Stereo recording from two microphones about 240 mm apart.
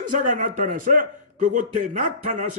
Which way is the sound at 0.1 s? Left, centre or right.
Right.